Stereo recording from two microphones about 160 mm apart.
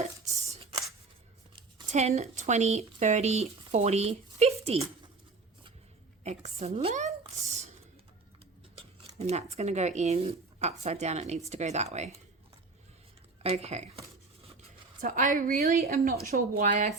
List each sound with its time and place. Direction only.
1.9 s speech: 45° right (ahead or behind)
6.2 s speech: 40° right (ahead or behind)
9.1 s speech: 40° right (ahead or behind)
13.4 s speech: 40° right (ahead or behind)
15.0 s a woman's voice: 60° right (ahead or behind)